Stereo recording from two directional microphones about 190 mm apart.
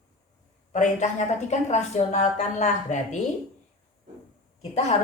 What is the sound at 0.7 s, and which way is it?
A woman's voice, 40° left (ahead or behind).